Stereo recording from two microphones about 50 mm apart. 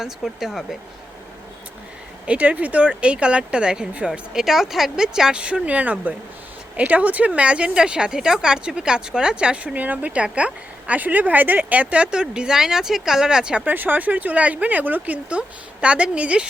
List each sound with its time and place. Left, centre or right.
0.0 s speech: centre
2.2 s a woman's voice: right
4.4 s a woman's voice: centre
9.7 s a woman's voice: right; by 13.7 s centre
13.7 s speech: right